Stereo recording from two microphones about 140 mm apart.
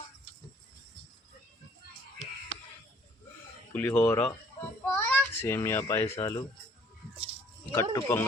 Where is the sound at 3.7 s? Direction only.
15° left (ahead or behind).